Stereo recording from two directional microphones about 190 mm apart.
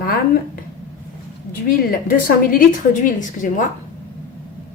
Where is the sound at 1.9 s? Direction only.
50° left (ahead or behind).